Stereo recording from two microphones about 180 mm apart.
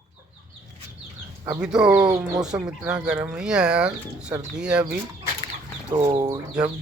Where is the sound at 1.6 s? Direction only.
5° right (ahead or behind).